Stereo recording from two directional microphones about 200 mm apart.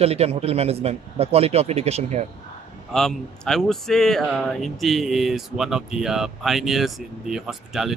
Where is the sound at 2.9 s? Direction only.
Centre (ahead or behind).